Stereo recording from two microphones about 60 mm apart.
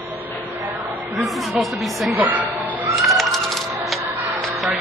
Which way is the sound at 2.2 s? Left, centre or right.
Right.